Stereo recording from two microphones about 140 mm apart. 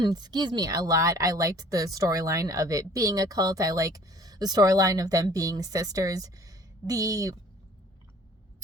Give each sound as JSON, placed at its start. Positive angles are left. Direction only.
{"t": 0.0, "sound": "speech", "side_deg": -30}